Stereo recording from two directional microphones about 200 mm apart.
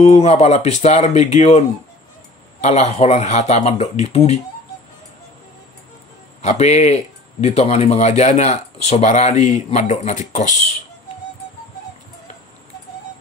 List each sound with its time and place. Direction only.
0.0 s speech: 35° left (ahead or behind)
6.4 s speech: 35° left (ahead or behind)